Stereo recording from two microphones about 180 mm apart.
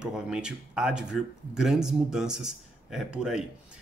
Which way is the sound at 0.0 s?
5° right (ahead or behind).